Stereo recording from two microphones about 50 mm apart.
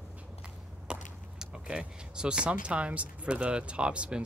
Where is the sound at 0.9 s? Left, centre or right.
Centre.